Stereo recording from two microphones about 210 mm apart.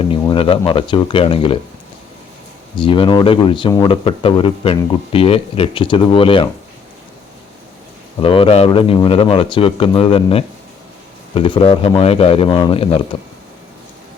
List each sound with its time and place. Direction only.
0.1 s speech: 25° left (ahead or behind)
2.7 s speech: 25° left (ahead or behind)
8.2 s speech: 25° left (ahead or behind)